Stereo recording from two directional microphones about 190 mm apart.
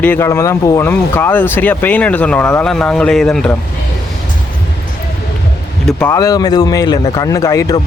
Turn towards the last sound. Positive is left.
turn(degrees=15)  # may be behind; listen again after turning